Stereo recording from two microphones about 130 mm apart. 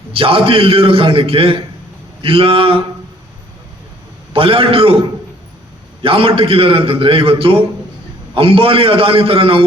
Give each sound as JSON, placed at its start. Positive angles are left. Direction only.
{"t": 0.1, "sound": "a man's voice", "side_deg": -45}
{"t": 4.3, "sound": "a man's voice", "side_deg": -45}
{"t": 6.0, "sound": "a man's voice", "side_deg": -45}